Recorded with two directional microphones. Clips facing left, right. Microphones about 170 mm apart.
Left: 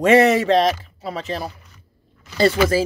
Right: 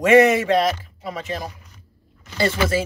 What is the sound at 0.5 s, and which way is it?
Speech, 35° left (ahead or behind).